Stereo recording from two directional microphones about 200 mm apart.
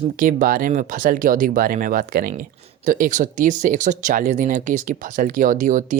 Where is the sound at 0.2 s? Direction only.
40° right (ahead or behind).